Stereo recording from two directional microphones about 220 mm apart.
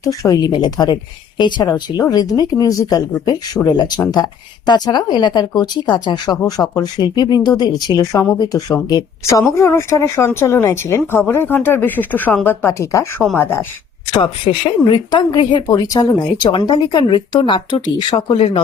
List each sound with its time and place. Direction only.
0.0 s speech: 15° left (ahead or behind)
14.2 s speech: 20° left (ahead or behind)